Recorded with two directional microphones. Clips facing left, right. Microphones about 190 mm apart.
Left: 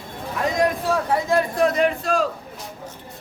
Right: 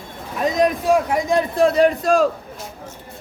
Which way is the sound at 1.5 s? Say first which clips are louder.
Right 4 dB; 30° right (ahead or behind).